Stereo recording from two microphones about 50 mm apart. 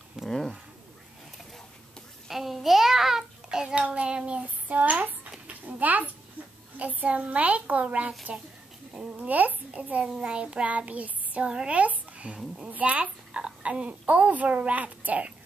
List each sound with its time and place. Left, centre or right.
0.2 s a sound: centre
2.2 s a sound: centre; by 6.0 s right
6.8 s a child's voice: right
8.3 s child singing: right
9.3 s a child's voice: right
10.2 s child singing: right
11.4 s a woman's voice: centre
11.7 s a child's voice: right